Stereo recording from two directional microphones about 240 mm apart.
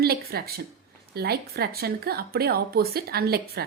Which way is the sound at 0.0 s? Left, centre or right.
Right.